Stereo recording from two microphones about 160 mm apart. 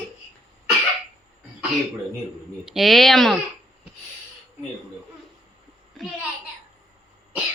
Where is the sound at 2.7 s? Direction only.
Centre (ahead or behind).